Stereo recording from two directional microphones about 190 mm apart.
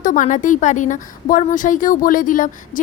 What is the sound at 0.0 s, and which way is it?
A woman's voice, 45° left (ahead or behind).